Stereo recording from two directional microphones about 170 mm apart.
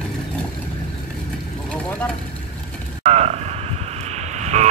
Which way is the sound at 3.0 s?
35° right (ahead or behind).